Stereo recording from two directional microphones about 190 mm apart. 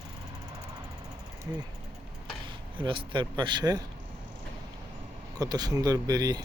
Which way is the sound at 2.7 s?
25° right (ahead or behind).